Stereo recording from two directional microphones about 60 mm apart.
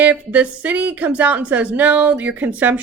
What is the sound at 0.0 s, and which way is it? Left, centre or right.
A woman's voice, right.